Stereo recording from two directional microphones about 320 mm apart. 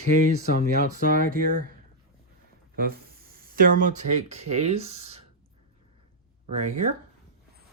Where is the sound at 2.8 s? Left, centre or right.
Right.